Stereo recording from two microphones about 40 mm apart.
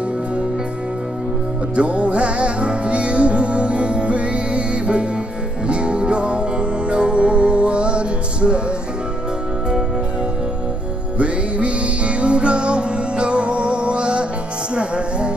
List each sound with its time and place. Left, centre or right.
1.8 s music: right
11.1 s music: right